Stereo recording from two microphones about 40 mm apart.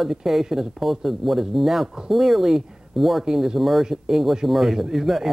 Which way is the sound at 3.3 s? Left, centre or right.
Centre.